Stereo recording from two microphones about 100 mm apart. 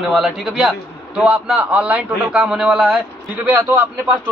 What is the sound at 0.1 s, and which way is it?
A man's voice, centre (ahead or behind).